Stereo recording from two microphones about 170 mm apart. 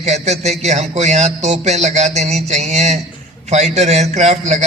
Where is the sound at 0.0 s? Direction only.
40° right (ahead or behind).